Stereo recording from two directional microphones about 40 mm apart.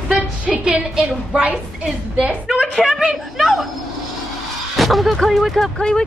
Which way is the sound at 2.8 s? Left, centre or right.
Centre.